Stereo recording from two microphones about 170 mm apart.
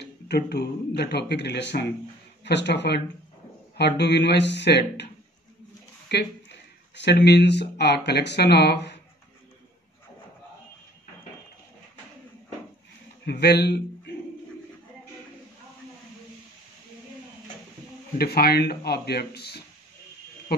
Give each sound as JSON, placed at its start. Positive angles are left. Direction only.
{"t": 0.0, "sound": "speech", "side_deg": 75}
{"t": 13.2, "sound": "a man's voice", "side_deg": 75}
{"t": 18.1, "sound": "speech", "side_deg": 65}